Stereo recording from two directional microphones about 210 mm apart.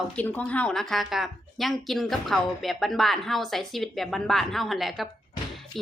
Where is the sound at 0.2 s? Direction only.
5° left (ahead or behind).